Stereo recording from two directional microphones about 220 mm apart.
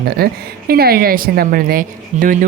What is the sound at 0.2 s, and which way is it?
A woman's voice, 45° right (ahead or behind).